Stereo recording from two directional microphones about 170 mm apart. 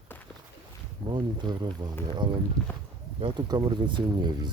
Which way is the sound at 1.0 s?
30° right (ahead or behind).